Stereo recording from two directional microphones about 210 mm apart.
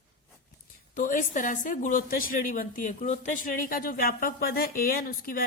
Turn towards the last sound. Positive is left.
turn(degrees=45)  # may be behind; listen again after turning